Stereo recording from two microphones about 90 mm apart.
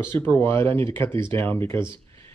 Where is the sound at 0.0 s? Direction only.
25° left (ahead or behind).